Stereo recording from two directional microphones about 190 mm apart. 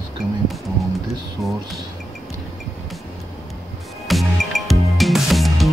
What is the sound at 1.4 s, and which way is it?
Speech, centre (ahead or behind).